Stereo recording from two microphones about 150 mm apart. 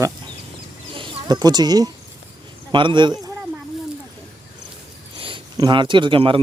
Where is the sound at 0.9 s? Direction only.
30° right (ahead or behind).